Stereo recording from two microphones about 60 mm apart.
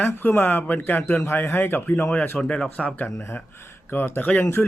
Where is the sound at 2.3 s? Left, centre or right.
Centre.